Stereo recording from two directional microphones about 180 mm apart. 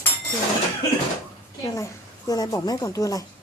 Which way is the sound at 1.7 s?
20° left (ahead or behind).